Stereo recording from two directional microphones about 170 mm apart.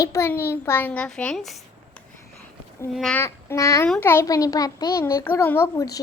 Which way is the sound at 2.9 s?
5° left (ahead or behind).